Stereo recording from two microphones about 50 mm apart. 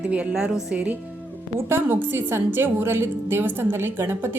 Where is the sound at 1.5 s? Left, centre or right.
Right.